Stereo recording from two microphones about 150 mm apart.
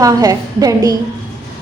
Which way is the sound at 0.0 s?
25° right (ahead or behind).